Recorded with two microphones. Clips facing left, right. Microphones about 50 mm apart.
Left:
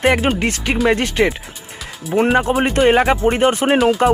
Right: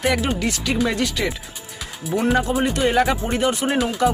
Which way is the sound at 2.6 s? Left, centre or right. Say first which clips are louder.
Left 5 dB; left.